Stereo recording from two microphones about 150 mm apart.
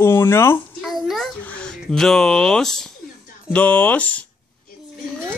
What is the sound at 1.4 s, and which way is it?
Speech, 10° left (ahead or behind).